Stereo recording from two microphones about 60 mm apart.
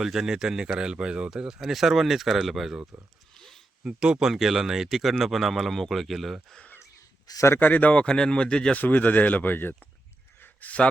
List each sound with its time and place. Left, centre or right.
0.0 s speech: centre
3.3 s a sound: centre
3.8 s speech: centre
7.3 s speech: left
7.6 s speech: left
8.8 s speech: left
10.4 s a sound: left